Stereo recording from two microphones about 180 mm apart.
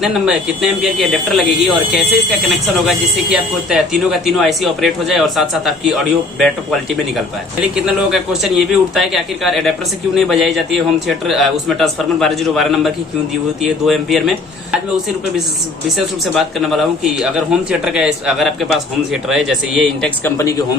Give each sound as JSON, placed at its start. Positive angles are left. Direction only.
{"t": 0.0, "sound": "a man's voice", "side_deg": -5}
{"t": 16.3, "sound": "a man's voice", "side_deg": 0}
{"t": 20.2, "sound": "speech", "side_deg": 15}